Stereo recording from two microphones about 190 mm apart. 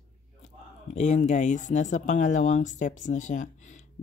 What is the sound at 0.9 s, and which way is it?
Speech, 35° left (ahead or behind).